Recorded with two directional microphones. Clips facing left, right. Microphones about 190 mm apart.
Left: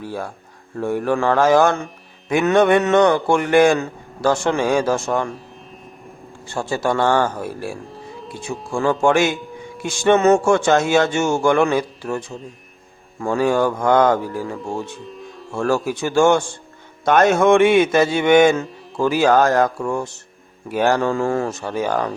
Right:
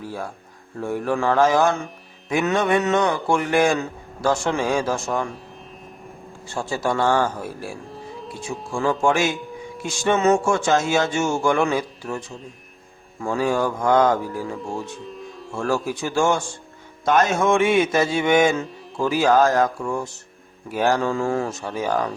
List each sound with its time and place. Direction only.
0.8 s speech: 60° left (ahead or behind)
6.5 s speech: 65° left (ahead or behind)
7.9 s music: centre (ahead or behind)
8.7 s speech: 60° left (ahead or behind)
13.2 s speech: 60° left (ahead or behind)
15.0 s music: centre (ahead or behind)
15.6 s a man's voice: 65° left (ahead or behind)